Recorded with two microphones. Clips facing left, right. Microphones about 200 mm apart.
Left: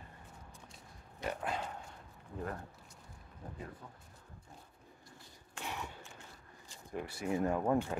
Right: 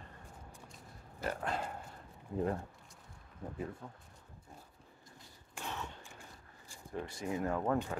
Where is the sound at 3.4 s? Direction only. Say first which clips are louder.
Right 5 dB; 25° right (ahead or behind).